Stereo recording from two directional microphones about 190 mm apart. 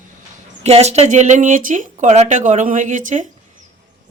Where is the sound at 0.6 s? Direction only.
35° right (ahead or behind).